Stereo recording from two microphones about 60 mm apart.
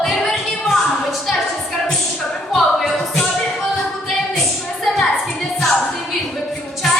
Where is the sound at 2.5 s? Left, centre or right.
Centre.